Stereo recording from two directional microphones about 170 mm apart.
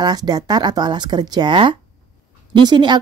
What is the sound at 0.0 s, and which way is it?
A woman's voice, 25° right (ahead or behind).